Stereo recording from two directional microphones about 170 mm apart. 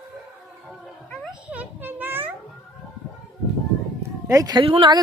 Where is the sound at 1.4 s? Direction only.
10° right (ahead or behind).